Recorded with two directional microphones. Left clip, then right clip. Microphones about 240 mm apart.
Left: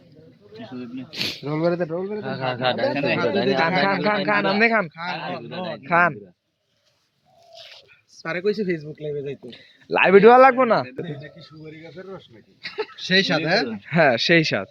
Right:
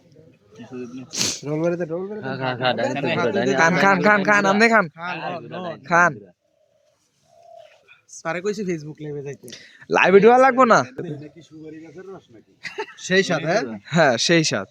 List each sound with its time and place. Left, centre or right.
1.1 s speech: right
1.5 s speech: centre
2.2 s speech: right
2.9 s speech: centre
3.2 s speech: right
4.9 s speech: centre
5.5 s speech: centre
8.2 s speech: right
10.2 s speech: centre
10.6 s a man's voice: right
12.6 s speech: right
13.0 s speech: centre